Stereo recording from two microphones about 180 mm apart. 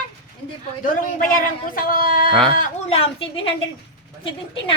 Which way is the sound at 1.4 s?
50° left (ahead or behind).